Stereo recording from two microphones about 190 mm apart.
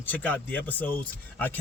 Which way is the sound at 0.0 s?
10° left (ahead or behind).